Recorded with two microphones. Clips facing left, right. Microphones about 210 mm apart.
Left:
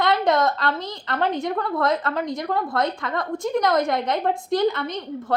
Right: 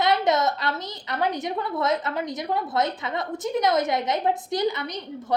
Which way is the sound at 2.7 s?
20° right (ahead or behind).